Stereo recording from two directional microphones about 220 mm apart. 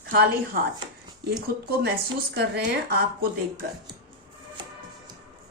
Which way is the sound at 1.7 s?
45° right (ahead or behind).